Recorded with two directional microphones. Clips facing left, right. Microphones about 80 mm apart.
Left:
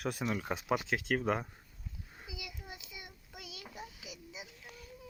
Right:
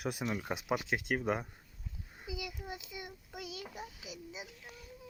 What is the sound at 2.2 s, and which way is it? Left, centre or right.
Child singing, right.